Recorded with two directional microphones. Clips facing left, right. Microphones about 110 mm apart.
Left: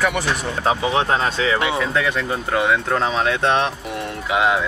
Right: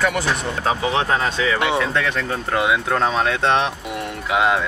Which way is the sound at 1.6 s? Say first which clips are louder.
Right 1 dB; centre (ahead or behind).